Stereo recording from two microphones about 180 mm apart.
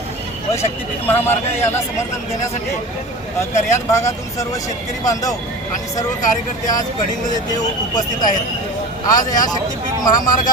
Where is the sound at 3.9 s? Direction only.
15° left (ahead or behind).